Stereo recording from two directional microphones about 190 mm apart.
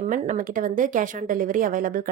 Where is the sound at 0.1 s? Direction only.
45° right (ahead or behind).